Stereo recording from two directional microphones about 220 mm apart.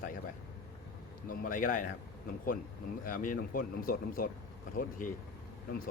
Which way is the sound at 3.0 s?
40° left (ahead or behind).